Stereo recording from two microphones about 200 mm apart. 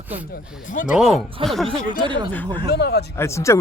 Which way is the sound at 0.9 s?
Centre (ahead or behind).